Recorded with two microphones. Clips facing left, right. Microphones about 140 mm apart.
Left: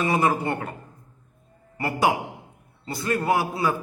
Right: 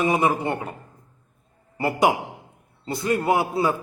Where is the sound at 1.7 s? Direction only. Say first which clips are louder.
Right 2 dB; 25° right (ahead or behind).